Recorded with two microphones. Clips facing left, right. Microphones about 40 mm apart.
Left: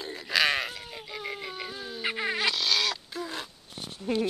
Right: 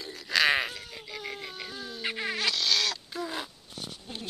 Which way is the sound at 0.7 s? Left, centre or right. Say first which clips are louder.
Left 2 dB; centre.